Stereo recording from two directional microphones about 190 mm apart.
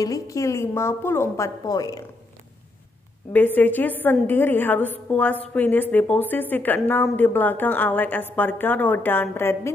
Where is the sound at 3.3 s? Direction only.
10° left (ahead or behind).